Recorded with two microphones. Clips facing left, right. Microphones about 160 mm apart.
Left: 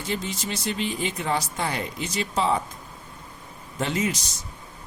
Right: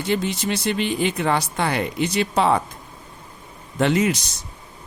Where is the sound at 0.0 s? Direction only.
70° right (ahead or behind).